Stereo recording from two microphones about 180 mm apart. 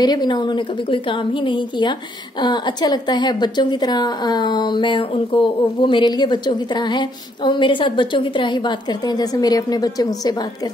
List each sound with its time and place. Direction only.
0.0 s a woman's voice: 25° left (ahead or behind)